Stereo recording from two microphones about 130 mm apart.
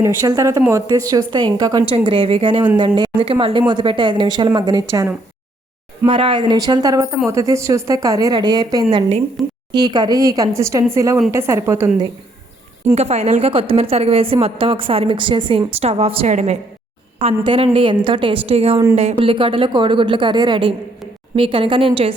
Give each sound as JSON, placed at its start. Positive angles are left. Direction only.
{"t": 0.0, "sound": "speech", "side_deg": -25}
{"t": 1.9, "sound": "a woman's voice", "side_deg": -45}
{"t": 4.9, "sound": "speech", "side_deg": -20}
{"t": 6.1, "sound": "a woman's voice", "side_deg": -40}
{"t": 9.0, "sound": "a woman's voice", "side_deg": -55}
{"t": 9.7, "sound": "speech", "side_deg": -35}
{"t": 12.9, "sound": "a woman's voice", "side_deg": -60}
{"t": 13.5, "sound": "a woman's voice", "side_deg": -45}
{"t": 15.8, "sound": "a woman's voice", "side_deg": -50}
{"t": 17.2, "sound": "a woman's voice", "side_deg": -45}